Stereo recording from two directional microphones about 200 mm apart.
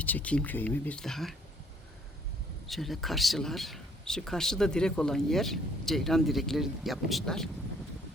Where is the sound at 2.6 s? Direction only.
Centre (ahead or behind).